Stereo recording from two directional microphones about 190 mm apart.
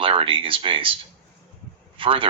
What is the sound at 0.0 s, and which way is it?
Speech, 30° right (ahead or behind).